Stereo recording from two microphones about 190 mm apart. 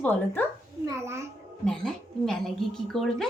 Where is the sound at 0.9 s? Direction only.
15° right (ahead or behind).